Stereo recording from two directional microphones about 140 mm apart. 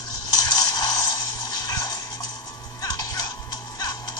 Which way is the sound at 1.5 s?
30° left (ahead or behind).